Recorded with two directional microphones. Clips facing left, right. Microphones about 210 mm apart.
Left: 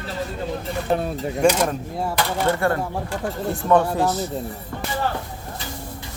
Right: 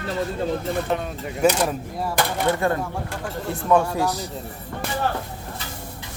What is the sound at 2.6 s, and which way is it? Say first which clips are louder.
Speech: left 1 dB; 20° right (ahead or behind).